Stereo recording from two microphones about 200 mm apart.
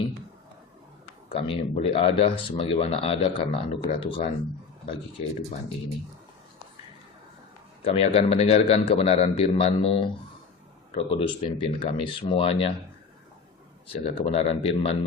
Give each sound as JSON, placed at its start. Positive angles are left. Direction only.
{"t": 1.3, "sound": "speech", "side_deg": 30}
{"t": 7.9, "sound": "speech", "side_deg": 30}
{"t": 14.0, "sound": "speech", "side_deg": 30}